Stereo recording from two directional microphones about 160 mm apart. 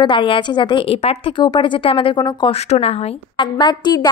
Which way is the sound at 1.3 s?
30° left (ahead or behind).